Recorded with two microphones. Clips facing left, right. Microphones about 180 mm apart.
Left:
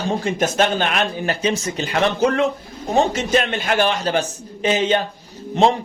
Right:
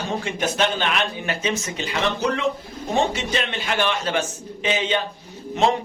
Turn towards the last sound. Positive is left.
turn(degrees=35)  # may be behind; listen again after turning